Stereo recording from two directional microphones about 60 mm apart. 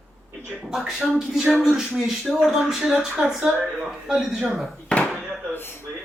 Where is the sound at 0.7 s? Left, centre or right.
Centre.